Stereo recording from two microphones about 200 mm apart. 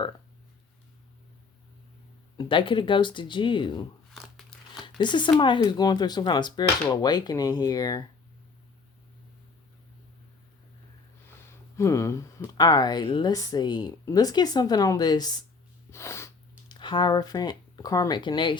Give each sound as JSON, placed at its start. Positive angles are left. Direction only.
{"t": 2.4, "sound": "speech", "side_deg": 25}
{"t": 4.9, "sound": "speech", "side_deg": 25}
{"t": 11.8, "sound": "speech", "side_deg": 15}
{"t": 15.9, "sound": "a sound", "side_deg": 15}